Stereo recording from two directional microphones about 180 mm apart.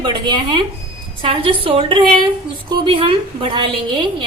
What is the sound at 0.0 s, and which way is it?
A woman's voice, 25° right (ahead or behind).